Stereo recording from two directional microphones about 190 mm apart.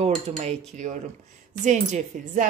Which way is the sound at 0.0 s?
35° right (ahead or behind).